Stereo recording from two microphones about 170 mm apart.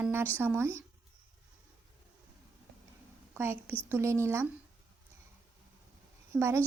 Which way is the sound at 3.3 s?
15° right (ahead or behind).